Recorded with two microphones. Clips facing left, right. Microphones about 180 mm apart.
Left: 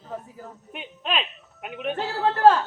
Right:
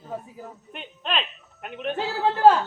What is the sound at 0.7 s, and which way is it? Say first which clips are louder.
Speech: left 1 dB; 5° left (ahead or behind).